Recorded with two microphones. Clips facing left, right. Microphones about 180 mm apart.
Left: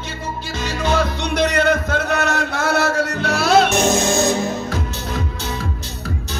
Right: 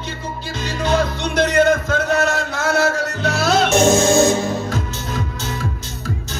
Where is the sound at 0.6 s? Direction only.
55° left (ahead or behind).